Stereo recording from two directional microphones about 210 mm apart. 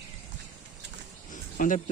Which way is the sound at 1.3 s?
35° left (ahead or behind).